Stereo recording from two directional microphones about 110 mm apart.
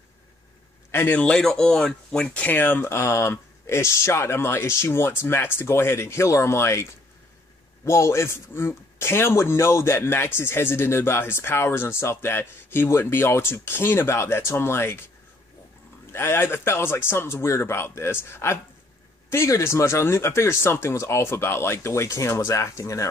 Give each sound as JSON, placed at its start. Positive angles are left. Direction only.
{"t": 0.9, "sound": "a man's voice", "side_deg": 15}
{"t": 16.1, "sound": "a man's voice", "side_deg": 20}